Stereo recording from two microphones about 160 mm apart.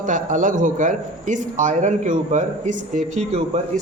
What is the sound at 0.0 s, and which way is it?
A man's voice, 55° right (ahead or behind).